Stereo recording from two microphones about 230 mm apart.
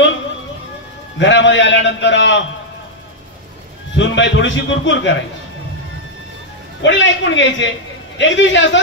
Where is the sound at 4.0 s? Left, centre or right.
Left.